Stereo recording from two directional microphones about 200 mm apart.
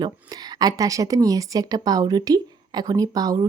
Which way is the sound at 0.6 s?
15° right (ahead or behind).